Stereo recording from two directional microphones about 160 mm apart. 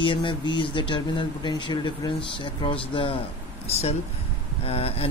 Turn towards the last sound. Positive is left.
turn(degrees=40)  # may be behind; listen again after turning